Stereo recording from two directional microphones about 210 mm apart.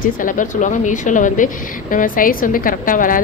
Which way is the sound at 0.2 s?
40° left (ahead or behind).